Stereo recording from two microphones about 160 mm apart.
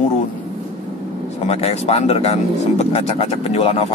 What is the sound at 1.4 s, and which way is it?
Speech, 45° left (ahead or behind).